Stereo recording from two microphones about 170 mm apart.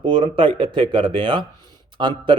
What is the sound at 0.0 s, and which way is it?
A man's voice, 30° right (ahead or behind).